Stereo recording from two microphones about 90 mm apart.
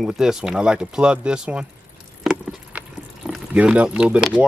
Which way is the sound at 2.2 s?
Centre (ahead or behind).